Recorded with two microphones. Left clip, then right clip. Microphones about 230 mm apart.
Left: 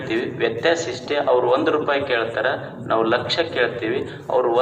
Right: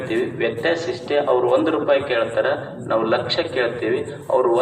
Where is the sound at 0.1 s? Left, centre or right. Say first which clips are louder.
Even; left.